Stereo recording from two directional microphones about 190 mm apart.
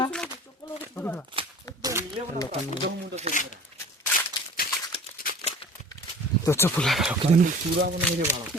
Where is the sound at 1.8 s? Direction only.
20° right (ahead or behind).